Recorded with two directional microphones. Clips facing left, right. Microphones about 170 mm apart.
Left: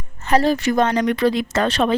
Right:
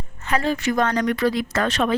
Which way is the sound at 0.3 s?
35° left (ahead or behind).